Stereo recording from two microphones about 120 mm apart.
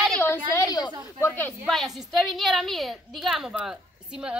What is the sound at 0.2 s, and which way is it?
Speech, 20° left (ahead or behind).